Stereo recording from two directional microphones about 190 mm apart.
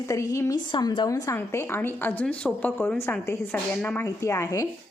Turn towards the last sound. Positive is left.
turn(degrees=15)  # may be behind; listen again after turning